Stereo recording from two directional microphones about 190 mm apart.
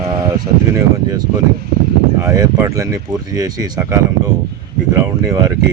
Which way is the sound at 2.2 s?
15° right (ahead or behind).